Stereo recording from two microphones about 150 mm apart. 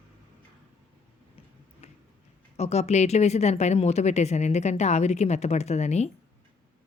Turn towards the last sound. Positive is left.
turn(degrees=50)  # may be behind; listen again after turning